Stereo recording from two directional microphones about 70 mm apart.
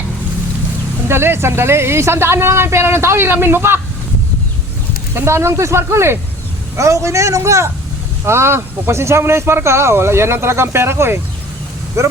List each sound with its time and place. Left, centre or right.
1.0 s speech: right
5.1 s a man's voice: right